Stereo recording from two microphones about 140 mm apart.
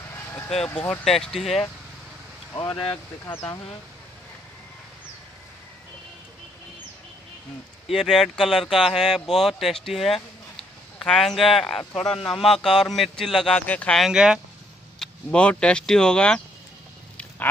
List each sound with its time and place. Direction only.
0.1 s vehicle: 20° left (ahead or behind)
0.7 s speech: 10° left (ahead or behind)
2.5 s speech: 25° left (ahead or behind)
2.9 s speech: 15° left (ahead or behind)
7.9 s speech: centre (ahead or behind)
15.0 s speech: 5° left (ahead or behind)